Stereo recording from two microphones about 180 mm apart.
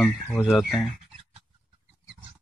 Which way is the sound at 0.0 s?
5° left (ahead or behind).